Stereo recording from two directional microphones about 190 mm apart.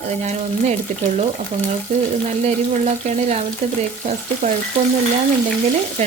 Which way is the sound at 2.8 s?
35° right (ahead or behind).